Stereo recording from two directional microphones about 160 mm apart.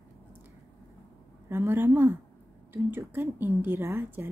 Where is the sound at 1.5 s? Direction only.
15° right (ahead or behind).